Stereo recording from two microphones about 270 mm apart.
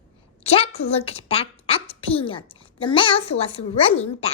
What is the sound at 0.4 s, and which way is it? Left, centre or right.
A woman's voice, left.